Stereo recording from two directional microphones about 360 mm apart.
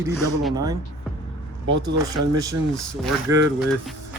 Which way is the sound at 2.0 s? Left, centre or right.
Centre.